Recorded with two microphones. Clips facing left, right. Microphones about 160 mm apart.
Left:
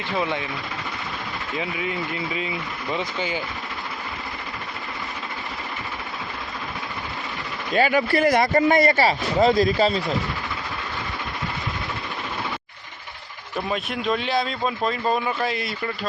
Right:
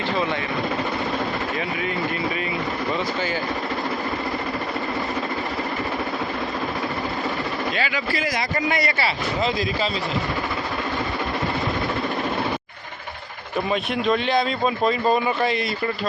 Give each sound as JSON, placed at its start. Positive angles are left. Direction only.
{"t": 7.8, "sound": "speech", "side_deg": 50}
{"t": 13.7, "sound": "speech", "side_deg": 0}